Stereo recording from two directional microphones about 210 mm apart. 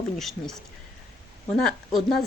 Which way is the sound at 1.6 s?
Centre (ahead or behind).